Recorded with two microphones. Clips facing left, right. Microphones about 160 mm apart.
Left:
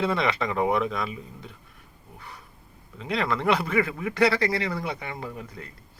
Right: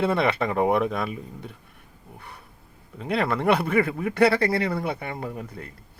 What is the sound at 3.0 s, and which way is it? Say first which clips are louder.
Speech: right 2 dB; 50° right (ahead or behind).